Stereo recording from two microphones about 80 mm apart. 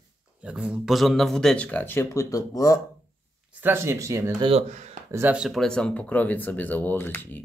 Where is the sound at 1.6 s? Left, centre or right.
Centre.